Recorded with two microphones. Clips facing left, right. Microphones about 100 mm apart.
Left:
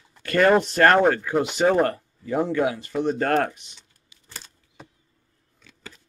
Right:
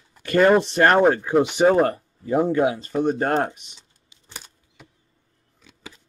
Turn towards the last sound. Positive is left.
turn(degrees=-15)  # may be behind; listen again after turning